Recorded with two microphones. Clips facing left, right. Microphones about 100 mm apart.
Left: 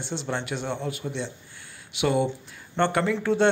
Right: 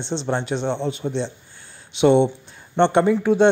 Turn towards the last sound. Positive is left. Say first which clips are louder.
# right 6 dB
turn(degrees=-20)  # may be behind; listen again after turning